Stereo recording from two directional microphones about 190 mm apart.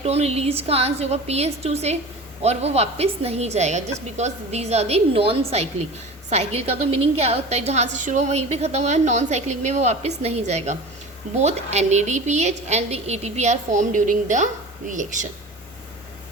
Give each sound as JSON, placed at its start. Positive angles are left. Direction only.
{"t": 0.0, "sound": "a woman's voice", "side_deg": -35}